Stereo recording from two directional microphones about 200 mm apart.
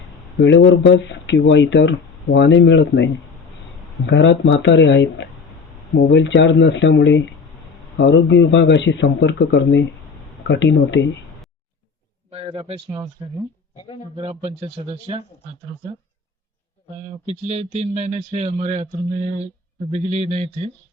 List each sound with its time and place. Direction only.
0.3 s speech: 65° left (ahead or behind)
12.3 s a man's voice: 30° right (ahead or behind)
14.2 s a man's voice: 30° right (ahead or behind)
17.2 s a man's voice: 35° right (ahead or behind)